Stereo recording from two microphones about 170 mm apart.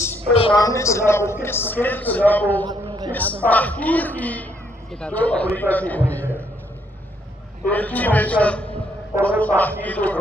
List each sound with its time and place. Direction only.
0.0 s a sound: 10° left (ahead or behind)
0.3 s a woman's voice: 30° left (ahead or behind)
0.6 s a man's voice: 15° left (ahead or behind)
2.6 s a sound: 25° right (ahead or behind)
3.1 s a man's voice: 10° left (ahead or behind)
7.7 s a man's voice: 10° left (ahead or behind)